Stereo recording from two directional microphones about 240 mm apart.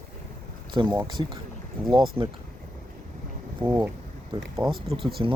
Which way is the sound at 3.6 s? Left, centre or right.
Centre.